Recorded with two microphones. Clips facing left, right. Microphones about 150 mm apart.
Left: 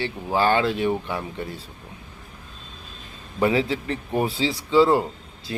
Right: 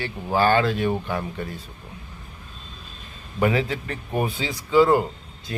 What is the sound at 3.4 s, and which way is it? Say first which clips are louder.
Speech: left 1 dB; 25° left (ahead or behind).